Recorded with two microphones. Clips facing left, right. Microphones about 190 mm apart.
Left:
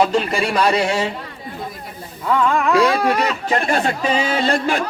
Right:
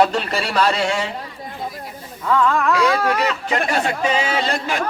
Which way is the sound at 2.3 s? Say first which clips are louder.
Left 1 dB; 15° left (ahead or behind).